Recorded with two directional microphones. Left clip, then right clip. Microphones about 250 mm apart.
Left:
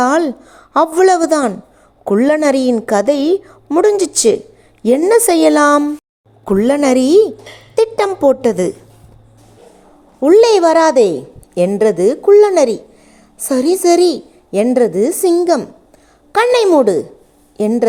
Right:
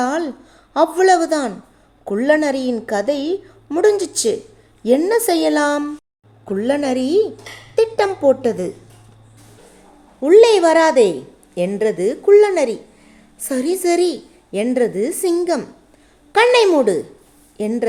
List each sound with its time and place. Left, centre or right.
0.0 s a woman's voice: left
10.2 s a woman's voice: left